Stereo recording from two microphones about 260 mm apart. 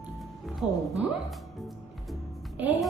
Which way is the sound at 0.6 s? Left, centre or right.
Centre.